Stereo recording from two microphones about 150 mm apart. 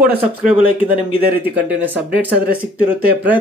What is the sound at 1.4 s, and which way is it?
A man's voice, 10° right (ahead or behind).